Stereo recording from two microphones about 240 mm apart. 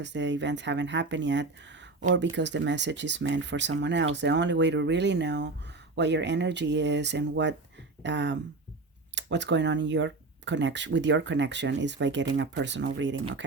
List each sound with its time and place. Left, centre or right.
0.0 s speech: right